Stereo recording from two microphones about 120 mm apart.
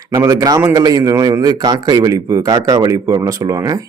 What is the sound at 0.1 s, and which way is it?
Speech, 25° right (ahead or behind).